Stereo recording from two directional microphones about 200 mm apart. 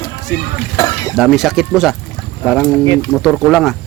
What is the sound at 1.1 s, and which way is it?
Speech, centre (ahead or behind).